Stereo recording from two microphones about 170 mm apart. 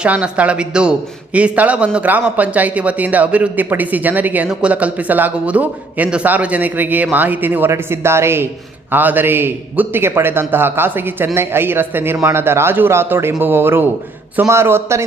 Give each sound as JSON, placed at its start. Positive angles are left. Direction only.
{"t": 0.0, "sound": "speech", "side_deg": -5}